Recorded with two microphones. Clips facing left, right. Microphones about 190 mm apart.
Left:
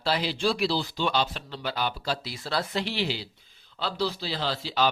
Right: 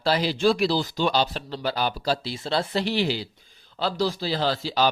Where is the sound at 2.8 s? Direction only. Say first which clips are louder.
Right 5 dB; 45° right (ahead or behind).